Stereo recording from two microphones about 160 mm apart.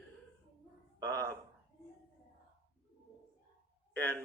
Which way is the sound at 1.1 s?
15° left (ahead or behind).